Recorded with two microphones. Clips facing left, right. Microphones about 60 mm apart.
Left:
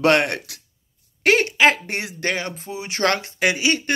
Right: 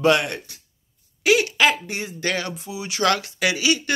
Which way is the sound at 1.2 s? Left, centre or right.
Left.